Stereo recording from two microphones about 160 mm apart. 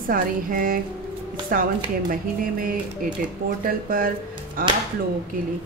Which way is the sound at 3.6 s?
65° right (ahead or behind).